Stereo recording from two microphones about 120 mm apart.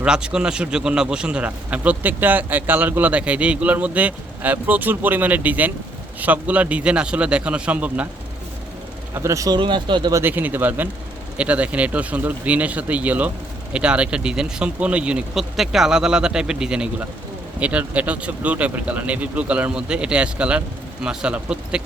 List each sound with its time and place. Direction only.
0.0 s a man's voice: 10° right (ahead or behind)
9.1 s speech: 25° right (ahead or behind)
9.6 s speech: 40° right (ahead or behind)
10.1 s a man's voice: 20° right (ahead or behind)